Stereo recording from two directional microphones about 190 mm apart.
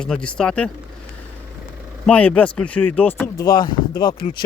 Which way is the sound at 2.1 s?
5° left (ahead or behind).